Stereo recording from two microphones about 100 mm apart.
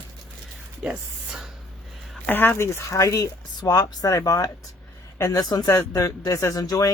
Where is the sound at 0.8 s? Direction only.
10° right (ahead or behind).